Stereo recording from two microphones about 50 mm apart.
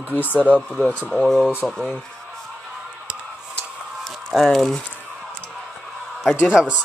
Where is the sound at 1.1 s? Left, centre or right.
Centre.